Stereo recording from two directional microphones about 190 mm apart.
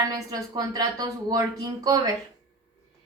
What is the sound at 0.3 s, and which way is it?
Speech, 20° right (ahead or behind).